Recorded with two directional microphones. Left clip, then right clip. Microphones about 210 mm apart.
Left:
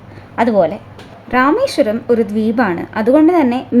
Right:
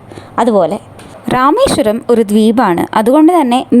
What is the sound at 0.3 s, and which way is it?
A woman's voice, 35° right (ahead or behind).